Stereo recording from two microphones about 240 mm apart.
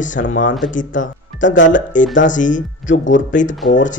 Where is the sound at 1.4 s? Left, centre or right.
Left.